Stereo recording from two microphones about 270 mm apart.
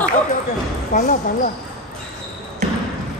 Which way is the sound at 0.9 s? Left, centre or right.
Left.